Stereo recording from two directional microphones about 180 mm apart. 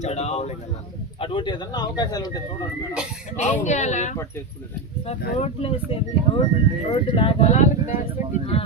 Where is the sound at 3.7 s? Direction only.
40° left (ahead or behind).